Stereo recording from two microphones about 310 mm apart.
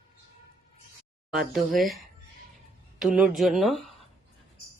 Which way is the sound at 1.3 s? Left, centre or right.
Centre.